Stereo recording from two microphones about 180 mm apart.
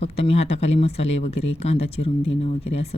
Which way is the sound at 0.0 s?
35° left (ahead or behind).